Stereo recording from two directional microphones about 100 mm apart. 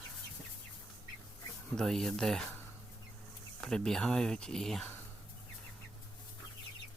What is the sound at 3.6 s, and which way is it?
Speech, 5° left (ahead or behind).